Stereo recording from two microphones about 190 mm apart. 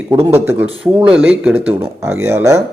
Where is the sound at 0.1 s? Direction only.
10° right (ahead or behind).